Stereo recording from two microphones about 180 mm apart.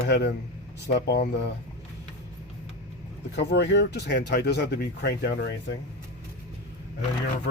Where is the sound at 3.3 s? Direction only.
70° left (ahead or behind).